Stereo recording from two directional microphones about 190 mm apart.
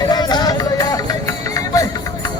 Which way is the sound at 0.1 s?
20° left (ahead or behind).